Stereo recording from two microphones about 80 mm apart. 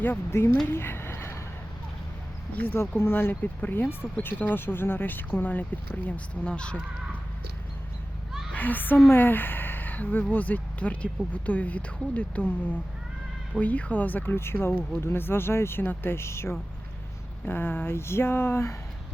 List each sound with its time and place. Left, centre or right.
0.0 s speech: left
0.7 s a sound: left
2.7 s speech: left; by 6.7 s centre
8.5 s a woman's voice: left